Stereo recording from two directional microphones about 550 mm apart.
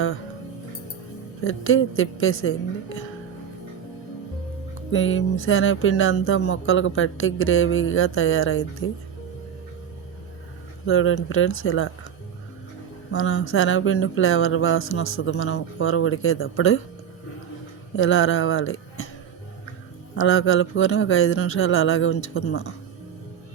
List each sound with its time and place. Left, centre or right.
1.5 s speech: left
4.9 s speech: left
10.8 s speech: left
13.1 s speech: left
17.9 s a sound: left
20.1 s speech: left